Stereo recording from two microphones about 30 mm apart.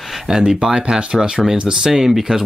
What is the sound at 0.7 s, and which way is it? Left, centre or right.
Speech, right.